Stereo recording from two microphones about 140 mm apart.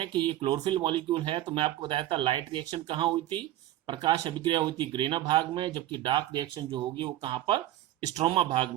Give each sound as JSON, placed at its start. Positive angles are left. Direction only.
{"t": 0.0, "sound": "speech", "side_deg": -35}